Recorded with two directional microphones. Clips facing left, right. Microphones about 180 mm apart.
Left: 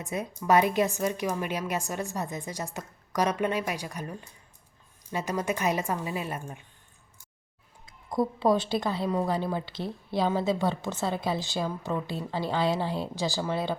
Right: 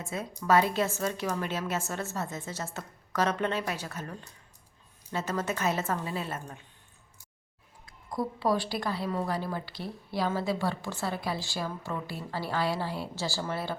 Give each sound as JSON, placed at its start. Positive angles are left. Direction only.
{"t": 0.0, "sound": "a woman's voice", "side_deg": 20}
{"t": 7.9, "sound": "a woman's voice", "side_deg": 20}